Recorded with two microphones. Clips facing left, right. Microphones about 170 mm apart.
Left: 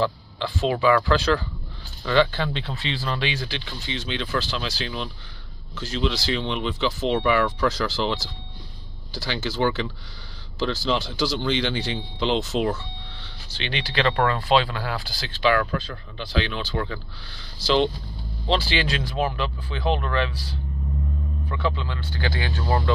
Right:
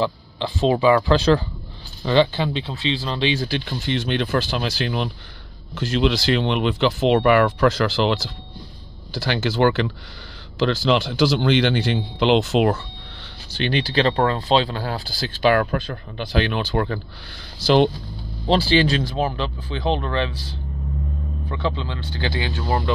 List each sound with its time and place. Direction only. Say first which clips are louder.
0.0 s speech: right 1 dB; 25° right (ahead or behind)
3.4 s speech: right 8 dB; 50° right (ahead or behind)
13.6 s speech: right 6 dB; 40° right (ahead or behind)
18.5 s speech: right 6 dB; 35° right (ahead or behind)
21.5 s speech: right 2 dB; 25° right (ahead or behind)